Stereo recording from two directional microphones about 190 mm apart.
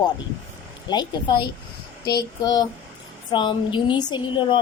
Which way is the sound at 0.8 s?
20° left (ahead or behind).